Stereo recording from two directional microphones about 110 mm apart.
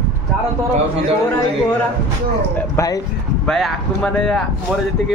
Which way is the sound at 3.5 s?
Centre (ahead or behind).